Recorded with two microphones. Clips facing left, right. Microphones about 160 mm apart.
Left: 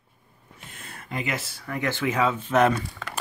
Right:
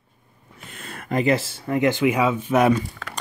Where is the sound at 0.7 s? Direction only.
70° right (ahead or behind).